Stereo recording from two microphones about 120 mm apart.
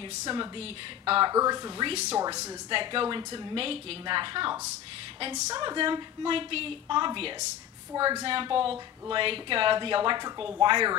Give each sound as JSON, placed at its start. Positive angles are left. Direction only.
{"t": 0.2, "sound": "a woman's voice", "side_deg": -40}
{"t": 1.3, "sound": "speech", "side_deg": -30}
{"t": 1.9, "sound": "speech", "side_deg": -60}
{"t": 2.1, "sound": "speech", "side_deg": -30}
{"t": 2.7, "sound": "a woman's voice", "side_deg": -45}